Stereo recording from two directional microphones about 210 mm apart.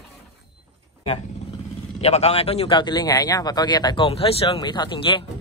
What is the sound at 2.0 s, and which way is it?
Speech, 30° left (ahead or behind).